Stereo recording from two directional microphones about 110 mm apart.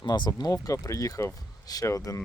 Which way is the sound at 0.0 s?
40° left (ahead or behind).